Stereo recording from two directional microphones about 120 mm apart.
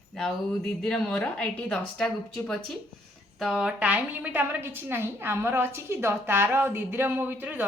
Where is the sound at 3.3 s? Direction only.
5° right (ahead or behind).